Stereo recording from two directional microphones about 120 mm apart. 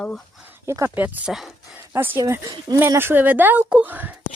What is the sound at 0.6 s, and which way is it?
Speech, 25° right (ahead or behind).